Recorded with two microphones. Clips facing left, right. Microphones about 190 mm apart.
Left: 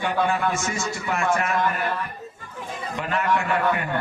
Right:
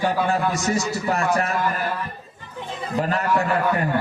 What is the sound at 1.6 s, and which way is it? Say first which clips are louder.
Speech: even; 5° right (ahead or behind).